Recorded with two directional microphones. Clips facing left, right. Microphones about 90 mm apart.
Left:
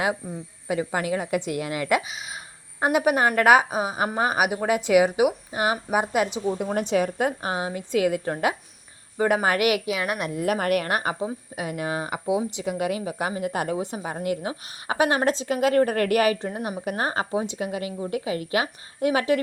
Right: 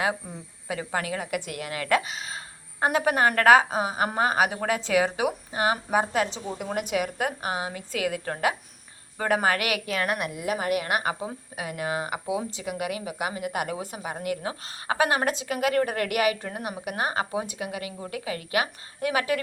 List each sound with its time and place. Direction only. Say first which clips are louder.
0.9 s speech: left 1 dB; 20° left (ahead or behind)
2.0 s a woman's voice: even; 5° left (ahead or behind); by 9.9 s 25° left (ahead or behind)
9.9 s a woman's voice: even; 10° left (ahead or behind)
10.4 s a woman's voice: left 5 dB; 55° left (ahead or behind)
10.8 s a woman's voice: left 1 dB; 35° left (ahead or behind)
11.1 s speech: left 4 dB; 25° left (ahead or behind)
16.4 s speech: left 4 dB; 25° left (ahead or behind)